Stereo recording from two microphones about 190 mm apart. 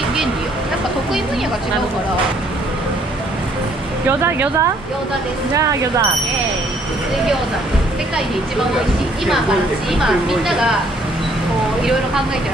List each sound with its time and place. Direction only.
4.2 s speech: 10° right (ahead or behind)
9.9 s a woman's voice: centre (ahead or behind)